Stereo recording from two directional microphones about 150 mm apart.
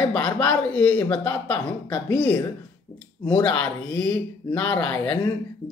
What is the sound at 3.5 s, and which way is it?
Speech, 15° left (ahead or behind).